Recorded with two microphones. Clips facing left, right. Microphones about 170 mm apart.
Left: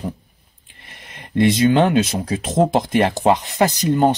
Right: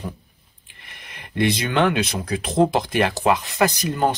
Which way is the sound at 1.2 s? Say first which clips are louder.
Left 6 dB; 25° left (ahead or behind).